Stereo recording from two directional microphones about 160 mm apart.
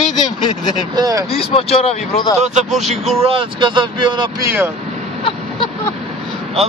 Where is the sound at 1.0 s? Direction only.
20° right (ahead or behind).